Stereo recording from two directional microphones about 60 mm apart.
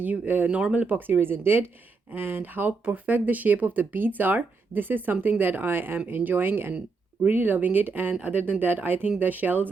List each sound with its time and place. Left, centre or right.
0.0 s speech: right